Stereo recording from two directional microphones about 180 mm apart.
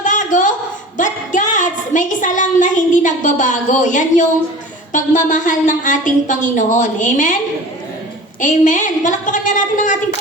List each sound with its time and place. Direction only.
0.0 s a sound: 45° left (ahead or behind)
4.9 s a woman's voice: 45° left (ahead or behind)
8.4 s a woman's voice: 45° left (ahead or behind)